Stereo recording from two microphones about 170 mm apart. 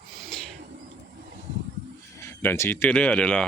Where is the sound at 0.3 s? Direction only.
5° left (ahead or behind).